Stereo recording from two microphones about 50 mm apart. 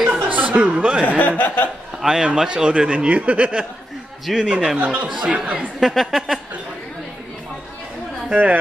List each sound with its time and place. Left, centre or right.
0.1 s chuckle: right
1.0 s speech: left
2.0 s speech: centre
4.3 s speech: centre
4.7 s speech: right
5.3 s speech: centre
5.8 s a woman's voice: centre